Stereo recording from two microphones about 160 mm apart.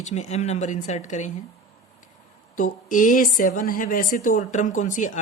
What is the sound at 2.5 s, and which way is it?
A woman's voice, 55° left (ahead or behind).